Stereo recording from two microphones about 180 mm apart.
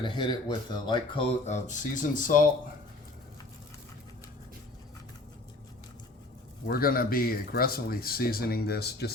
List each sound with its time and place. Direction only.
0.0 s speech: 25° left (ahead or behind)
1.5 s speech: 40° left (ahead or behind)
6.7 s speech: 55° left (ahead or behind)